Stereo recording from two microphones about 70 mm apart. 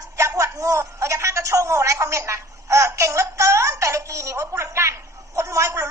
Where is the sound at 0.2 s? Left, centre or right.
Right.